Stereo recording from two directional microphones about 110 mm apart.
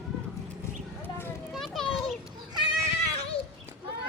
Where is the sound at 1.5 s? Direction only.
Centre (ahead or behind).